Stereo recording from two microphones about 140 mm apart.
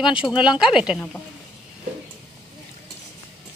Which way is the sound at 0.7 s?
5° right (ahead or behind).